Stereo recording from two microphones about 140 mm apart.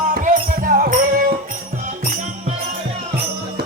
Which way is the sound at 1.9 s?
60° right (ahead or behind).